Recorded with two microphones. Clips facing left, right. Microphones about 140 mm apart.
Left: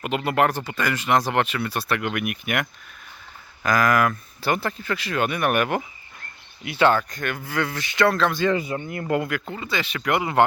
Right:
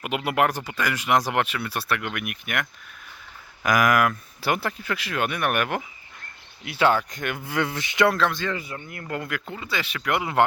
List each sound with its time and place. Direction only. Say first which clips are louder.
0.0 s speech: left 2 dB; 10° right (ahead or behind)
3.6 s speech: even; 15° right (ahead or behind)
7.1 s speech: left 1 dB; 20° right (ahead or behind)
8.2 s speech: left 2 dB; 5° left (ahead or behind)
8.4 s speech: left 8 dB; 20° left (ahead or behind)
9.2 s speech: left 4 dB; centre (ahead or behind)